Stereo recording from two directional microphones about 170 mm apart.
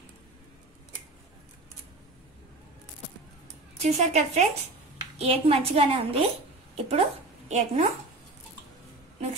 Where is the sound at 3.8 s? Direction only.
40° right (ahead or behind).